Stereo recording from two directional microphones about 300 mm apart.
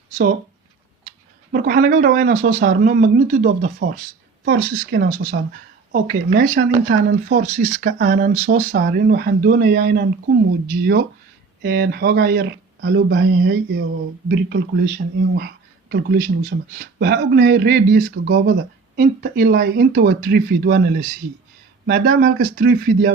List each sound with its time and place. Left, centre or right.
0.1 s speech: right
1.5 s speech: right
11.6 s speech: right